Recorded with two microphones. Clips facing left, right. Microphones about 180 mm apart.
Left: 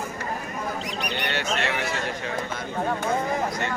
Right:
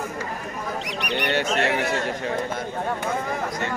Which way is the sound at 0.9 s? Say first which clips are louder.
Right 2 dB; 75° right (ahead or behind).